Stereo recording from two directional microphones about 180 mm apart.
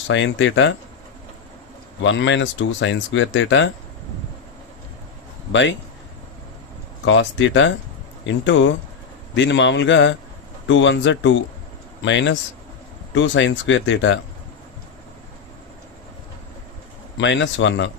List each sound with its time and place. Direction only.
0.1 s speech: 90° left
2.0 s speech: 90° left
5.5 s speech: 90° left
7.0 s a man's voice: 90° left
17.2 s speech: 90° left